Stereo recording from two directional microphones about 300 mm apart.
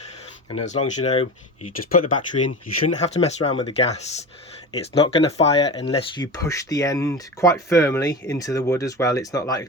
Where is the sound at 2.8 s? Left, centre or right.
Centre.